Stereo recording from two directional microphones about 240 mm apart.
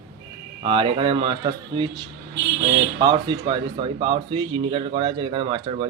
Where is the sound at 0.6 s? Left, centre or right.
Right.